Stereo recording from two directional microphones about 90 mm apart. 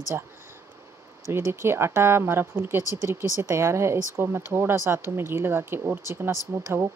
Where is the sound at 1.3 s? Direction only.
30° right (ahead or behind).